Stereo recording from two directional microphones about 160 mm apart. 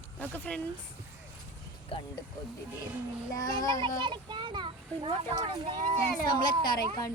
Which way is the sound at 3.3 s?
20° left (ahead or behind).